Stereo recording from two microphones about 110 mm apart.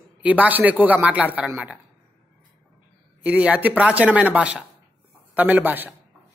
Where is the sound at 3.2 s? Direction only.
10° right (ahead or behind).